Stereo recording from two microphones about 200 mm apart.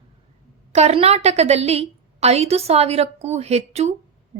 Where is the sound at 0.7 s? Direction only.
35° right (ahead or behind).